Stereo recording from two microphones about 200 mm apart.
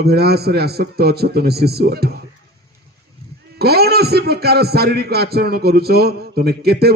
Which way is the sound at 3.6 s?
50° right (ahead or behind).